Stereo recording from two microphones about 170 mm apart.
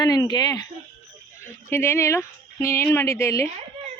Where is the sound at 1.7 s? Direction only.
15° left (ahead or behind).